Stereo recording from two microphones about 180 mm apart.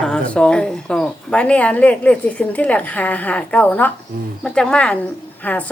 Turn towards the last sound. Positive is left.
turn(degrees=10)  # may be behind; listen again after turning